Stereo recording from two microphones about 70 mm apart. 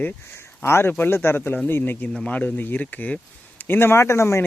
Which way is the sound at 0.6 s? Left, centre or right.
Left.